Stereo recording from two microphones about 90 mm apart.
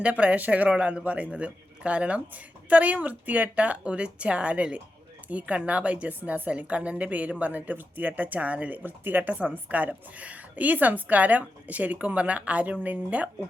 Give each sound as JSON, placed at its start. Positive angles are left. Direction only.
{"t": 0.0, "sound": "a woman's voice", "side_deg": -15}